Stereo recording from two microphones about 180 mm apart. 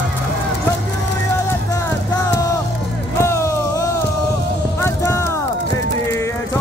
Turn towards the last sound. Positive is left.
turn(degrees=15)  # may be behind; listen again after turning